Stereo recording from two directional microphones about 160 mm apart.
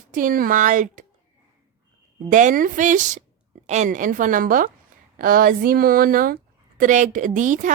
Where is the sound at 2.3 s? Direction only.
55° right (ahead or behind).